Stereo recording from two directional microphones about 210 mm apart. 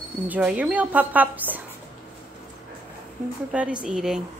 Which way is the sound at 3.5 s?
5° right (ahead or behind).